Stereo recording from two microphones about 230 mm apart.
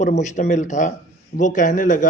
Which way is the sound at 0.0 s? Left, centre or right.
Left.